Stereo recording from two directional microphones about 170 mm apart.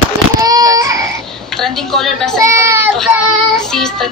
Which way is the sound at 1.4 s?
Centre (ahead or behind).